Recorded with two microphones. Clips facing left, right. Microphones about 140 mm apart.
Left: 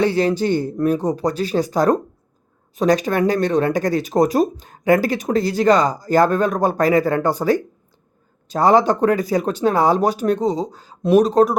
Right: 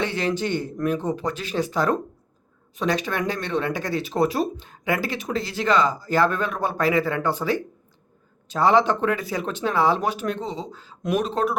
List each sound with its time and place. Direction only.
0.0 s speech: 35° left (ahead or behind)